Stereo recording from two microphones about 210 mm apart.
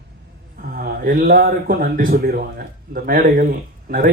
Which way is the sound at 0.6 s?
45° right (ahead or behind).